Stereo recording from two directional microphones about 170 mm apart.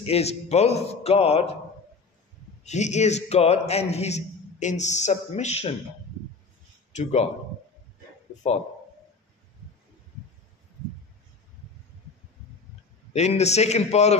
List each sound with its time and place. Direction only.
0.0 s a man's voice: 35° left (ahead or behind)
2.6 s a man's voice: 45° left (ahead or behind)
7.0 s a man's voice: 40° left (ahead or behind)
13.1 s a man's voice: 40° left (ahead or behind)